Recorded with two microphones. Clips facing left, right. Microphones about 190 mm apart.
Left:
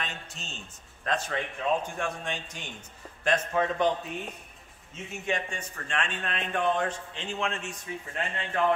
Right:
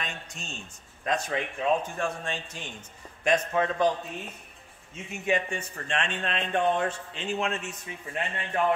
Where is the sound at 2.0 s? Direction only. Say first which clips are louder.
Right 2 dB; centre (ahead or behind).